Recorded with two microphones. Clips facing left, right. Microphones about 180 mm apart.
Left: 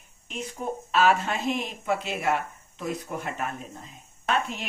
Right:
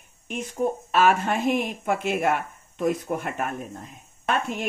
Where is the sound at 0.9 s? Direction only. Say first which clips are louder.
Even; 50° right (ahead or behind).